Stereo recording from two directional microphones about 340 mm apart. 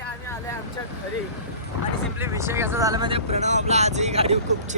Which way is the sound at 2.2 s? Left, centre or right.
Centre.